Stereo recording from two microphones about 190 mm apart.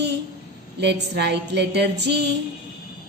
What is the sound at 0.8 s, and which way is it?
A woman's voice, 60° right (ahead or behind).